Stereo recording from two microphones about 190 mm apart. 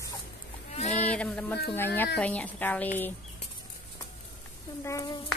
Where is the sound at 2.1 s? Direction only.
5° left (ahead or behind).